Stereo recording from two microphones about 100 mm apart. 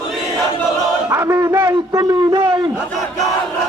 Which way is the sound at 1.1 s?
30° right (ahead or behind).